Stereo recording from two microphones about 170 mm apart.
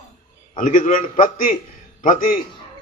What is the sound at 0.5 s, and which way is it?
A man's voice, 55° left (ahead or behind).